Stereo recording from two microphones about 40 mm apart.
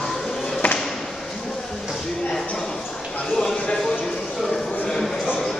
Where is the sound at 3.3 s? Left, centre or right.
Centre.